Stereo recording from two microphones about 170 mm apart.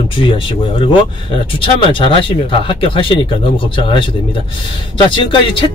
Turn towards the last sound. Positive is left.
turn(degrees=30)  # may be behind; listen again after turning